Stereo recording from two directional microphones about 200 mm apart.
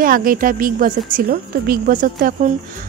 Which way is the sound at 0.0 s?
45° right (ahead or behind).